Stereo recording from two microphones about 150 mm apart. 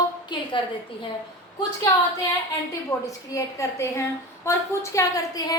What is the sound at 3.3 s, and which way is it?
A woman's voice, 20° left (ahead or behind).